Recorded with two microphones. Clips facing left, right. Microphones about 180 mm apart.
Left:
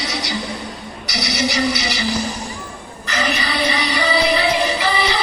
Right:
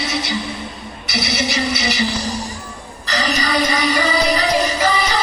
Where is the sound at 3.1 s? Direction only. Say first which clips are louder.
Right 2 dB; 35° right (ahead or behind).